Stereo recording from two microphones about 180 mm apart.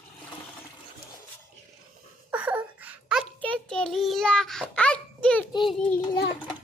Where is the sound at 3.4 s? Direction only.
5° left (ahead or behind).